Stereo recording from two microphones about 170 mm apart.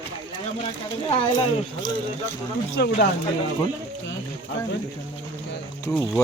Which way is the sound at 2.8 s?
80° left.